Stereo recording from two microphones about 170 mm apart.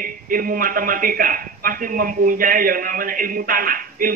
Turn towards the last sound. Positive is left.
turn(degrees=-55)  # may be behind; listen again after turning